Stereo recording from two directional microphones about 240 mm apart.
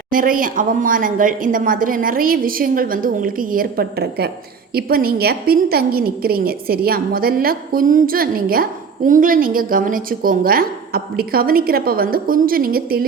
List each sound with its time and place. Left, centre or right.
0.1 s a woman's voice: right